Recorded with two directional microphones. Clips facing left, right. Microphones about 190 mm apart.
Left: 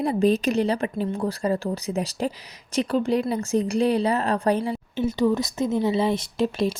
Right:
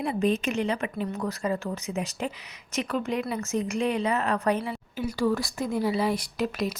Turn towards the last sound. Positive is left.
turn(degrees=25)  # may be behind; listen again after turning